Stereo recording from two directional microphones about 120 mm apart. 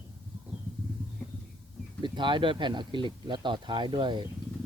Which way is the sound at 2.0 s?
40° right (ahead or behind).